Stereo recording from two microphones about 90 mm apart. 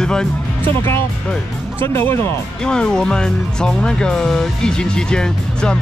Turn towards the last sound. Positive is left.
turn(degrees=10)  # may be behind; listen again after turning